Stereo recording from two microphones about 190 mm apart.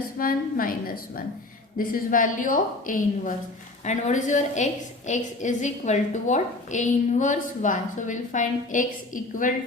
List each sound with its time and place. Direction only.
0.2 s a woman's voice: 45° left (ahead or behind)